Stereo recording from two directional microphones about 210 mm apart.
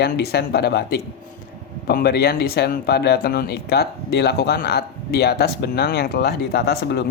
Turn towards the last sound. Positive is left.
turn(degrees=50)  # may be behind; listen again after turning